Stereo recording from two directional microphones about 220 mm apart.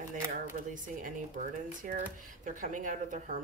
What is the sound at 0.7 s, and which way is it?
Speech, 40° right (ahead or behind).